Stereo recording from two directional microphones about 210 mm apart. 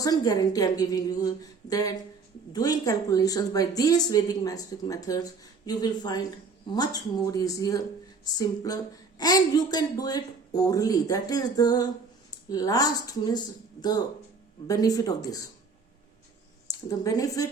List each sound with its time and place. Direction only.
0.0 s speech: 15° left (ahead or behind)
16.6 s a woman's voice: 15° left (ahead or behind)